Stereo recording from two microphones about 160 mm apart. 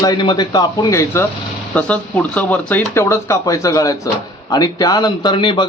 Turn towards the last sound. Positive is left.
turn(degrees=30)  # may be behind; listen again after turning